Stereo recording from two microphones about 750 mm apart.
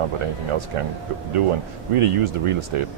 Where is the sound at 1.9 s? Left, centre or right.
Right.